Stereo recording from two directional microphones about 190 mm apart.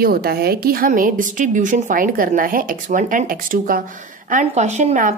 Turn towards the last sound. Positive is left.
turn(degrees=-40)  # may be behind; listen again after turning